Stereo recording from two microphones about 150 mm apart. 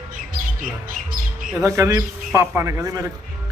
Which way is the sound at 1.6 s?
20° right (ahead or behind).